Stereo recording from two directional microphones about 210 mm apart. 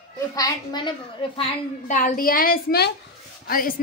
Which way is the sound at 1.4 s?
40° left (ahead or behind).